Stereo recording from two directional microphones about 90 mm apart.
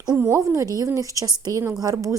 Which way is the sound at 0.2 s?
30° right (ahead or behind).